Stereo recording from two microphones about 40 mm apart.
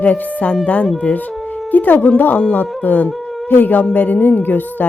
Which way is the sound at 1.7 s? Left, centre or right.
Left.